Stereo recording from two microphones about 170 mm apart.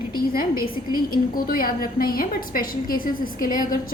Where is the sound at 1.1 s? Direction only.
60° left (ahead or behind).